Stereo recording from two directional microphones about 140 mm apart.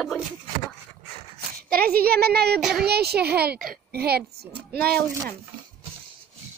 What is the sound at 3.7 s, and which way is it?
Speech, 90° right.